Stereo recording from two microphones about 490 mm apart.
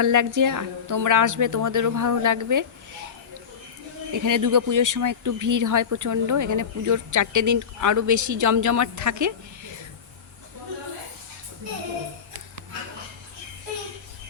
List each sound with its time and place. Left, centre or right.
0.0 s speech: right
4.1 s speech: right